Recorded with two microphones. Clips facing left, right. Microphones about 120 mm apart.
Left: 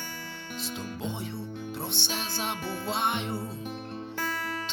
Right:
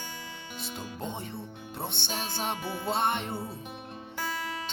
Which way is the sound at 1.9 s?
55° right (ahead or behind).